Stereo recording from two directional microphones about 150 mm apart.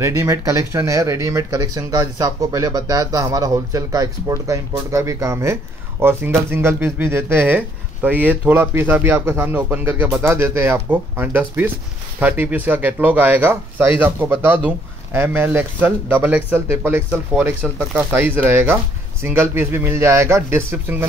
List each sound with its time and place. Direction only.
0.0 s speech: 20° right (ahead or behind)
15.1 s speech: 15° right (ahead or behind)